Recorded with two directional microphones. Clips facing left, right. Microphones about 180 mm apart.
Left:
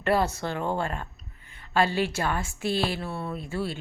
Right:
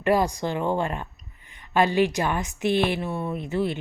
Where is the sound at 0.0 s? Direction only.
15° right (ahead or behind).